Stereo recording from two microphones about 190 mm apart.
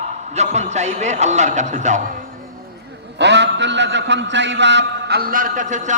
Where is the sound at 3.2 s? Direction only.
65° right (ahead or behind).